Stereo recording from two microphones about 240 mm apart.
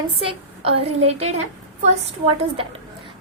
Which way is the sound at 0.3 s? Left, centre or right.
Right.